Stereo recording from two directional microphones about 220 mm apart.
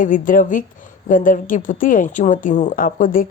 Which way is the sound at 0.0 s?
35° left (ahead or behind).